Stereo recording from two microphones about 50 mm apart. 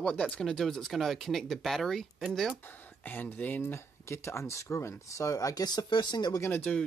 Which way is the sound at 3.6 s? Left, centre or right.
Left.